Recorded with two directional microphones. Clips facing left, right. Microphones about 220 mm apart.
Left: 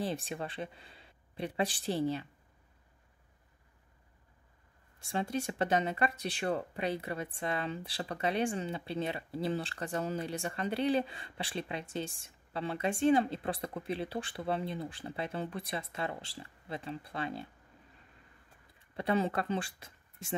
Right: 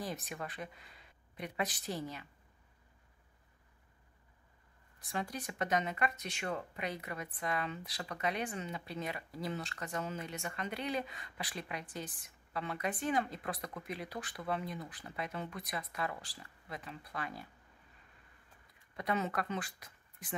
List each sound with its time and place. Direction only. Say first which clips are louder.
0.0 s speech: left 5 dB; 30° left (ahead or behind)
4.9 s speech: left 6 dB; 25° left (ahead or behind)
18.9 s speech: left 5 dB; 30° left (ahead or behind)